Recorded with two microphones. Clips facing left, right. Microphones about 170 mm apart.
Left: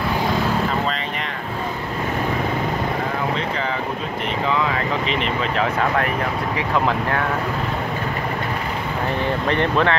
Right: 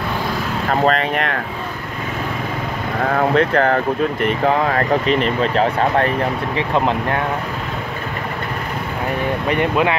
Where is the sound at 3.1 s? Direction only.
60° right (ahead or behind); by 6.0 s 35° right (ahead or behind).